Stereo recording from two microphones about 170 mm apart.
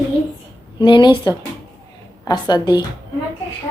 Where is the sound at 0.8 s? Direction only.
30° left (ahead or behind).